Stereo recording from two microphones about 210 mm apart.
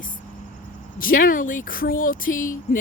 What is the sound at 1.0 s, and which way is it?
Speech, 40° left (ahead or behind).